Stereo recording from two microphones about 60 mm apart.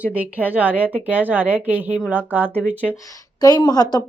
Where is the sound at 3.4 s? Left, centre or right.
Left.